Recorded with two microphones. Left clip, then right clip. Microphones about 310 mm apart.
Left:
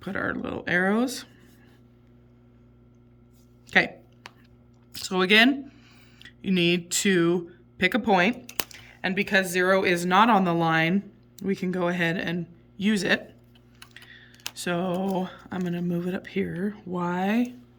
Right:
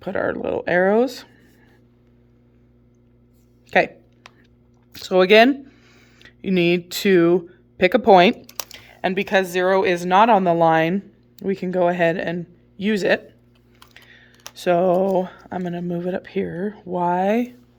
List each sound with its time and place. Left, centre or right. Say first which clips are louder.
0.0 s speech: right 7 dB; centre
3.7 s a woman's voice: right 4 dB; centre
14.5 s speech: right 12 dB; centre